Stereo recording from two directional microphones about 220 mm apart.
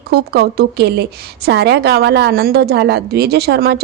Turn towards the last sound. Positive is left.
turn(degrees=-45)  # may be behind; listen again after turning